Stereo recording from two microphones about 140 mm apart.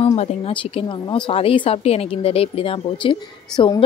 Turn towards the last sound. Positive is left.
turn(degrees=35)  # may be behind; listen again after turning